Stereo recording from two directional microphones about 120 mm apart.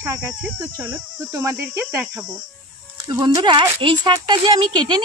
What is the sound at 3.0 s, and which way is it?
A woman's voice, 35° right (ahead or behind).